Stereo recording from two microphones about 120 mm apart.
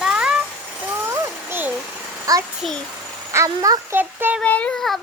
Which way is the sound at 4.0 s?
15° right (ahead or behind).